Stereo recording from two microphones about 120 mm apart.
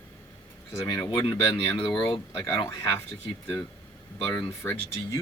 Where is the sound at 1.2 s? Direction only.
45° left (ahead or behind).